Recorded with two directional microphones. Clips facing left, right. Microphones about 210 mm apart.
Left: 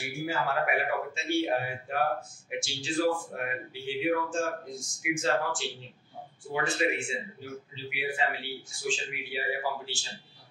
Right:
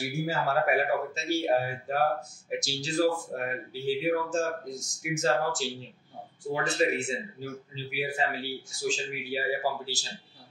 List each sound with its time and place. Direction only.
0.2 s speech: 40° right (ahead or behind)